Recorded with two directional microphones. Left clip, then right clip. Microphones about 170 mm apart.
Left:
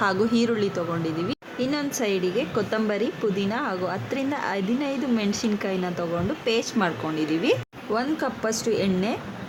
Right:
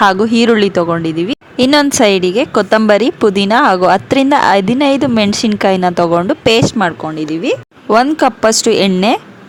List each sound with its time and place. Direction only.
0.0 s speech: 50° right (ahead or behind)
1.5 s a woman's voice: 65° right (ahead or behind); by 6.9 s 50° right (ahead or behind)
7.9 s a woman's voice: 65° right (ahead or behind)